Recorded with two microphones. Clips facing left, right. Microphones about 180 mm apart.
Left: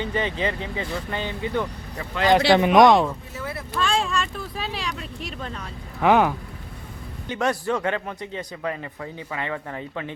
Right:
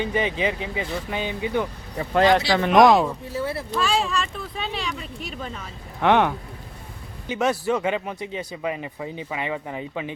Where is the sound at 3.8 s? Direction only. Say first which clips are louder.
Even; 5° right (ahead or behind).